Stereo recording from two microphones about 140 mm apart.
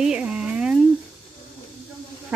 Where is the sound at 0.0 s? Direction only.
5° right (ahead or behind).